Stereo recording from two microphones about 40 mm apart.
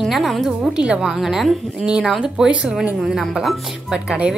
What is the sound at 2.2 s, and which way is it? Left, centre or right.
A woman's voice, right.